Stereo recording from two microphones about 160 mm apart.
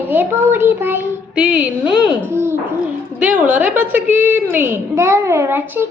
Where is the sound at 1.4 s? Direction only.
5° right (ahead or behind).